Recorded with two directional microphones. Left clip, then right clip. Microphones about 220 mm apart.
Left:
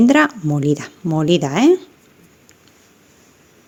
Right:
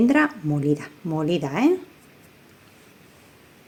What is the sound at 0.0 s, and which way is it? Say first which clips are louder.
Speech: left 6 dB; 35° left (ahead or behind).